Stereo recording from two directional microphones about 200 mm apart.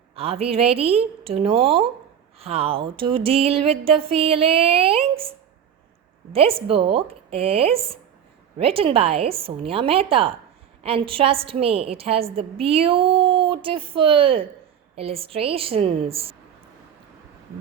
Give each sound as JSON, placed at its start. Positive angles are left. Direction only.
{"t": 0.2, "sound": "a woman's voice", "side_deg": -30}
{"t": 6.3, "sound": "a woman's voice", "side_deg": -30}